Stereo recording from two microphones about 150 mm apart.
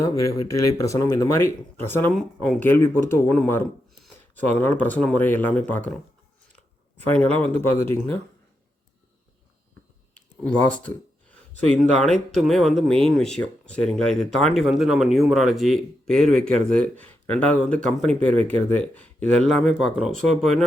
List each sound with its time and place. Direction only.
0.0 s speech: 20° left (ahead or behind)
2.1 s speech: centre (ahead or behind)
2.6 s speech: 15° left (ahead or behind)
10.4 s speech: 10° left (ahead or behind)